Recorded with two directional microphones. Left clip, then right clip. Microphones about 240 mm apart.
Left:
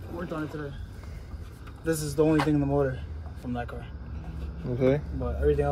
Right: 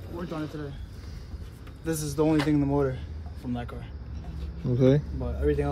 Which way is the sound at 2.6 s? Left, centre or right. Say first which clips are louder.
Even; right.